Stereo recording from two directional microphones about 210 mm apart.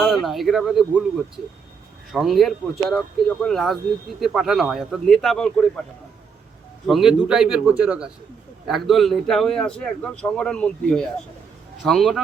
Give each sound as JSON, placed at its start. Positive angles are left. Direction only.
{"t": 0.0, "sound": "a man's voice", "side_deg": 0}
{"t": 6.8, "sound": "a man's voice", "side_deg": 0}